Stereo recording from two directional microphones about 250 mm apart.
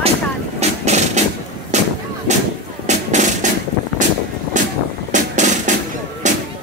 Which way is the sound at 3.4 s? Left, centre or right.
Right.